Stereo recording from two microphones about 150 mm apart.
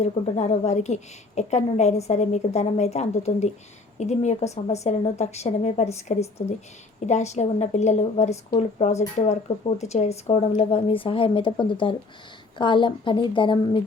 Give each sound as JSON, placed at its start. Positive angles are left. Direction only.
{"t": 0.0, "sound": "a woman's voice", "side_deg": 50}